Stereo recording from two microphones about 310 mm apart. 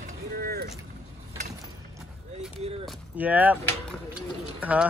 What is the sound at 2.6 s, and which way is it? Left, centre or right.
Speech, centre.